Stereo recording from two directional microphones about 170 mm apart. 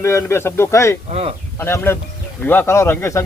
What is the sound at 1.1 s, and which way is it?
Speech, 35° right (ahead or behind).